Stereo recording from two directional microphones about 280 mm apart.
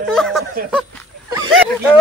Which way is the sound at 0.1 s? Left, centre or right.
Centre.